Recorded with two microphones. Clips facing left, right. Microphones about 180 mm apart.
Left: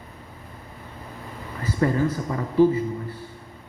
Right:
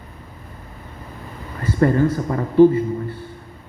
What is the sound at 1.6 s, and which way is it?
A man's voice, 55° right (ahead or behind).